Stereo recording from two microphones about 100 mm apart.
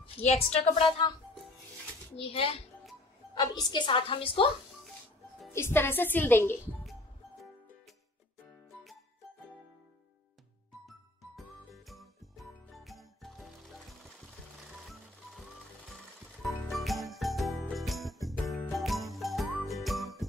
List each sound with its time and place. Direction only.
0.2 s a woman's voice: 90° left; by 1.0 s 65° left (ahead or behind)
2.1 s a child's voice: 70° left (ahead or behind)
3.3 s a woman's voice: 45° left (ahead or behind); by 4.5 s 60° left (ahead or behind)
5.5 s a woman's voice: 25° left (ahead or behind)
11.3 s music: centre (ahead or behind)
16.7 s jingle bell: centre (ahead or behind)
18.7 s jingle: centre (ahead or behind)
19.7 s music: centre (ahead or behind)